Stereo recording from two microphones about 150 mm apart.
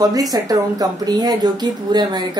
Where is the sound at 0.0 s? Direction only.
25° right (ahead or behind).